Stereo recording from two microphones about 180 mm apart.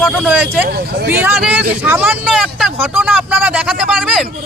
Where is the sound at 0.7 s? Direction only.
65° right (ahead or behind).